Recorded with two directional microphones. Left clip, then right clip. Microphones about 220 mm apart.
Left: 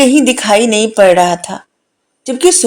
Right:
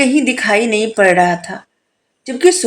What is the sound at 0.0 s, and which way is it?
Speech, 30° left (ahead or behind).